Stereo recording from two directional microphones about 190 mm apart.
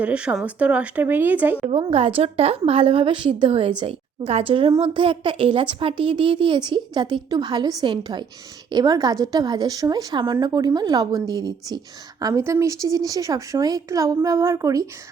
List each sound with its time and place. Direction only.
0.0 s speech: 5° right (ahead or behind)
1.7 s speech: 30° right (ahead or behind)